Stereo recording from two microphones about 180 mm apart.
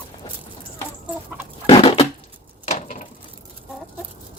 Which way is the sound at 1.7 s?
35° left (ahead or behind).